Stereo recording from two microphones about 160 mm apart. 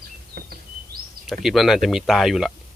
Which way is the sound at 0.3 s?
75° right (ahead or behind).